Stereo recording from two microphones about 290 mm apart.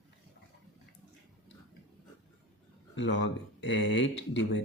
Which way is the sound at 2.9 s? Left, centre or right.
Left.